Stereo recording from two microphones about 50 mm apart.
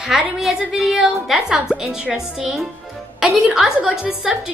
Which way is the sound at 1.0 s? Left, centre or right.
Centre.